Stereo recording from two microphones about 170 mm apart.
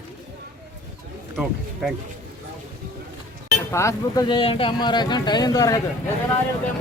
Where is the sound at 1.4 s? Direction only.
Centre (ahead or behind).